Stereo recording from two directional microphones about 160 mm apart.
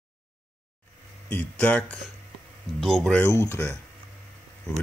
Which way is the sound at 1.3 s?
10° left (ahead or behind).